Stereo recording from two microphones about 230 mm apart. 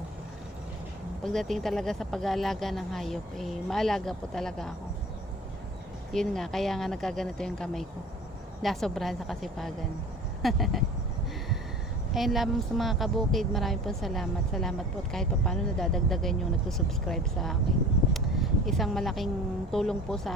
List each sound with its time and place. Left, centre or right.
1.2 s a woman's voice: centre
6.1 s a woman's voice: centre
12.1 s a woman's voice: centre